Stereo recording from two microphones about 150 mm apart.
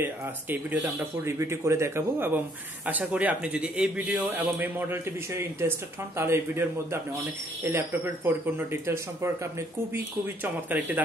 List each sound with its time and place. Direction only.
0.0 s a man's voice: 15° right (ahead or behind)